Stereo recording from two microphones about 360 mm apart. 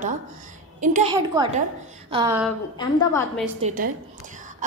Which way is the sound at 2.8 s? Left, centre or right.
Centre.